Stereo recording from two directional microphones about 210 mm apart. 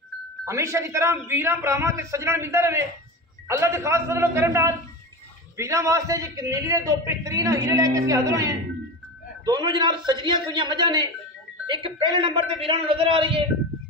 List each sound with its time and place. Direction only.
0.5 s a man's voice: 15° right (ahead or behind)